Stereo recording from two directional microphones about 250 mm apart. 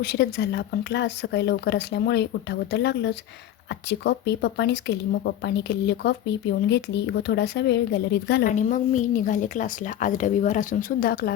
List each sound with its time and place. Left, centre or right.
0.0 s speech: left
8.4 s a woman's voice: left